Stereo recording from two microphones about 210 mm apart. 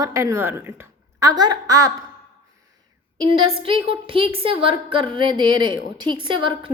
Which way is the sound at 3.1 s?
25° right (ahead or behind).